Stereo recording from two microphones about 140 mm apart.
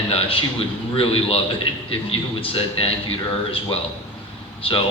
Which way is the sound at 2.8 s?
40° left (ahead or behind).